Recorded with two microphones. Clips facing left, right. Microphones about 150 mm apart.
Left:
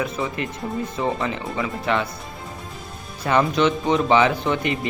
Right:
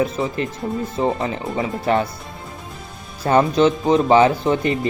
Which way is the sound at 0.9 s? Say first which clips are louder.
Right 4 dB; 30° right (ahead or behind).